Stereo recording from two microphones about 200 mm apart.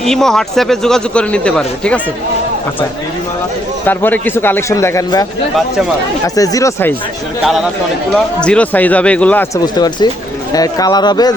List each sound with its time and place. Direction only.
0.0 s a man's voice: centre (ahead or behind)
3.8 s a man's voice: 10° left (ahead or behind)
6.2 s a man's voice: 15° left (ahead or behind)
7.4 s a man's voice: centre (ahead or behind)
9.7 s speech: 20° left (ahead or behind)